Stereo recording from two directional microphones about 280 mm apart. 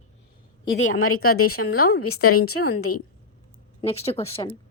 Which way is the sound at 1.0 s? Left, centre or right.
Left.